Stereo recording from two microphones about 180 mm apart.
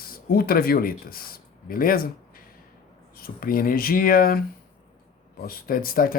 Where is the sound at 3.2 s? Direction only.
55° left (ahead or behind).